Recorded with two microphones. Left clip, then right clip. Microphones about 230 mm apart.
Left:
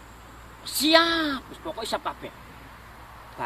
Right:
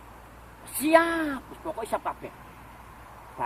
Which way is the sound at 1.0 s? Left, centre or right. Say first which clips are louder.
Left 3 dB; left.